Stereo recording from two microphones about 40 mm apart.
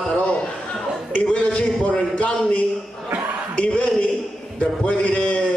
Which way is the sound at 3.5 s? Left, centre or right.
Left.